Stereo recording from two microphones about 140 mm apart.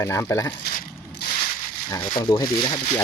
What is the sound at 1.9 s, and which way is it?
Speech, 30° left (ahead or behind).